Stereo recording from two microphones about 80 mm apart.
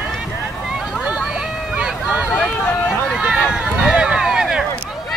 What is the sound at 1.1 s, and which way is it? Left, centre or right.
Hubbub, centre.